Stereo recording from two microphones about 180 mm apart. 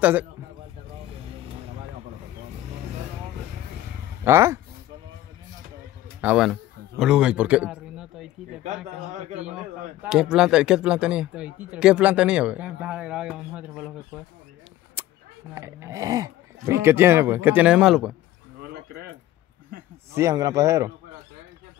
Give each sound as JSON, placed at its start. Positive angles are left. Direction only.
{"t": 0.0, "sound": "speech", "side_deg": -10}
{"t": 4.2, "sound": "speech", "side_deg": -15}
{"t": 6.2, "sound": "a man's voice", "side_deg": -5}
{"t": 9.4, "sound": "speech", "side_deg": -5}
{"t": 15.0, "sound": "a sound", "side_deg": -10}
{"t": 15.5, "sound": "speech", "side_deg": -15}
{"t": 18.7, "sound": "a sound", "side_deg": -60}
{"t": 20.2, "sound": "speech", "side_deg": -20}